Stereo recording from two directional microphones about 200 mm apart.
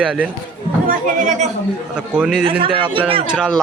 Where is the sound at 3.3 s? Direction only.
Centre (ahead or behind).